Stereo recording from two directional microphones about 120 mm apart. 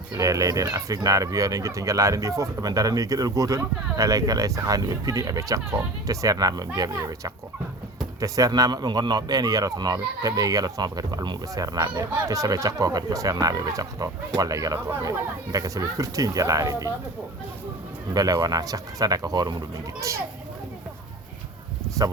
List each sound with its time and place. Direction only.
0.1 s a man's voice: 30° right (ahead or behind)
18.1 s a man's voice: 30° right (ahead or behind)